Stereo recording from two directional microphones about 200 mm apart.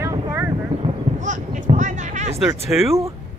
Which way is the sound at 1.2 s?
40° right (ahead or behind).